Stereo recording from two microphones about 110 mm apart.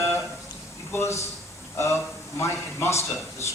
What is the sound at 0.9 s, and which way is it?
A man's voice, 25° left (ahead or behind).